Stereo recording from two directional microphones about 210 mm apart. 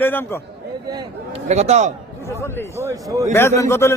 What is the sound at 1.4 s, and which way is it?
Speech, 30° right (ahead or behind).